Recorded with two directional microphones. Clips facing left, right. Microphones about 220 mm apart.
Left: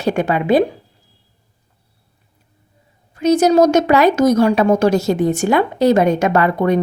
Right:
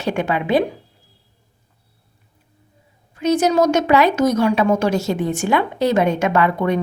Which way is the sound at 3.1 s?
40° left (ahead or behind).